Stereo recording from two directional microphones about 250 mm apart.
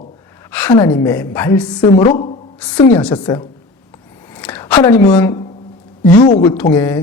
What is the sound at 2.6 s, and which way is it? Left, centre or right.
Speech, centre.